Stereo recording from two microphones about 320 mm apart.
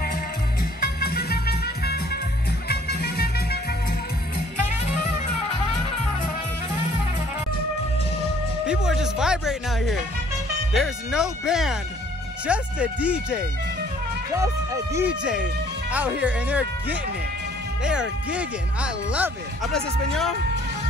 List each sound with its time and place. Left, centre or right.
0.7 s music: left
8.6 s speech: centre
15.0 s speech: centre
17.8 s speech: centre